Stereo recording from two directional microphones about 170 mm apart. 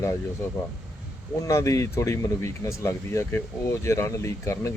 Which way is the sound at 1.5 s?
15° left (ahead or behind).